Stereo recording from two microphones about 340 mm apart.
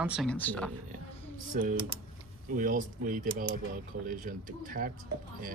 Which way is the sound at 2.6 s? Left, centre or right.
Right.